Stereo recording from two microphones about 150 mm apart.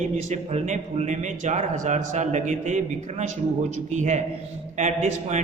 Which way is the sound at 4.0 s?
50° right (ahead or behind).